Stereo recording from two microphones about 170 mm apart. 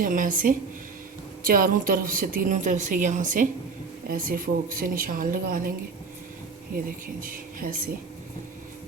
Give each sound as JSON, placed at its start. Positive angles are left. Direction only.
{"t": 0.0, "sound": "a woman's voice", "side_deg": -50}
{"t": 6.7, "sound": "a woman's voice", "side_deg": -55}